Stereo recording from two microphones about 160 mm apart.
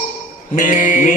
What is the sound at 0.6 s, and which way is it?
Mantra, 55° left (ahead or behind).